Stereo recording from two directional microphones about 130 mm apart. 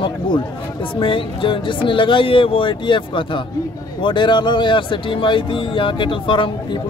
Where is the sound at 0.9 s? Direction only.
40° left (ahead or behind).